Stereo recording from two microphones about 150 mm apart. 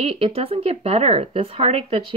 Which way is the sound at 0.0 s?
40° right (ahead or behind).